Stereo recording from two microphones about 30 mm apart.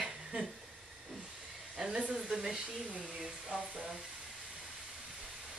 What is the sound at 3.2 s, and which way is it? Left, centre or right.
Speech, right.